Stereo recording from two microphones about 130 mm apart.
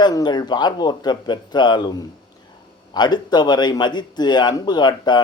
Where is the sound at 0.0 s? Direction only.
35° left (ahead or behind).